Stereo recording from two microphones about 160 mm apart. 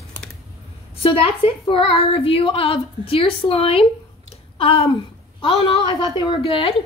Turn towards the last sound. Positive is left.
turn(degrees=35)  # may be behind; listen again after turning